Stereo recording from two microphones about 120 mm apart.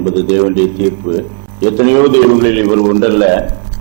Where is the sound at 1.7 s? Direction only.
15° right (ahead or behind).